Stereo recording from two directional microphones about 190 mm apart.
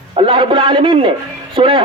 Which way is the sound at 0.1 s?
25° right (ahead or behind).